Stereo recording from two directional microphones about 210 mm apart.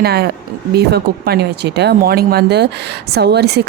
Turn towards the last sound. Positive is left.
turn(degrees=-50)  # may be behind; listen again after turning